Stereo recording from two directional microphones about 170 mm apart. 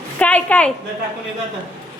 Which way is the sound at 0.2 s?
10° left (ahead or behind).